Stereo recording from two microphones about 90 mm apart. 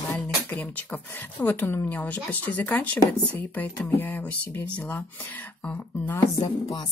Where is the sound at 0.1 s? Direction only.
15° left (ahead or behind).